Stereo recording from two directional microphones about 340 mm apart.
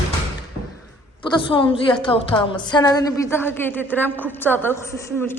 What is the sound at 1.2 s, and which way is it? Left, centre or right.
A woman's voice, centre.